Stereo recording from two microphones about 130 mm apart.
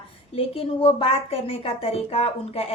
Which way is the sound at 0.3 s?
45° left (ahead or behind).